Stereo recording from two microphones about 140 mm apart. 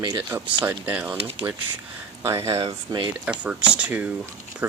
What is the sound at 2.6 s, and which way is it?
Speech, 40° right (ahead or behind).